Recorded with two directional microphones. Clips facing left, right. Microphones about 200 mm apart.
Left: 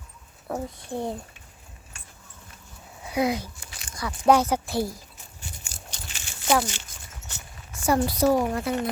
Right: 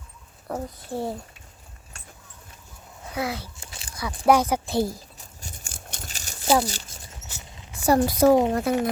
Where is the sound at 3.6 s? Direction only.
30° right (ahead or behind).